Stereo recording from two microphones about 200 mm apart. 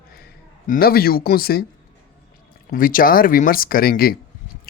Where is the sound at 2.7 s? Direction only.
45° left (ahead or behind).